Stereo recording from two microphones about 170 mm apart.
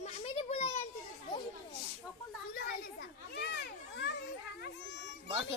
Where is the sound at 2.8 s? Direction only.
65° left (ahead or behind); by 5.4 s 90° left.